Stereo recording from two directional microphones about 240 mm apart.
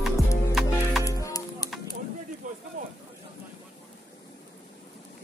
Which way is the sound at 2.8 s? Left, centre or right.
Right.